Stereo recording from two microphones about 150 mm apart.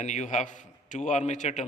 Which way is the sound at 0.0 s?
55° left (ahead or behind).